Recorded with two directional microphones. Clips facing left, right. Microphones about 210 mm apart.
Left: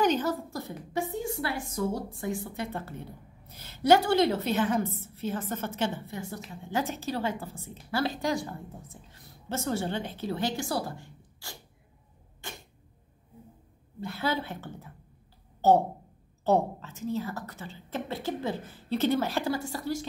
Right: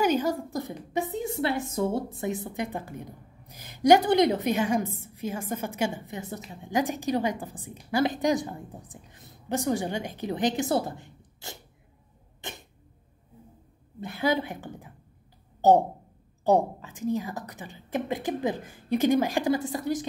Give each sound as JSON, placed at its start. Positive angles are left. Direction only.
{"t": 0.0, "sound": "a woman's voice", "side_deg": -10}
{"t": 12.4, "sound": "a sound", "side_deg": -20}
{"t": 14.0, "sound": "a woman's voice", "side_deg": -15}